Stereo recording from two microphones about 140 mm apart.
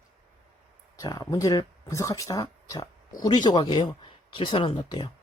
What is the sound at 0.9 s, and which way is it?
Speech, 25° left (ahead or behind).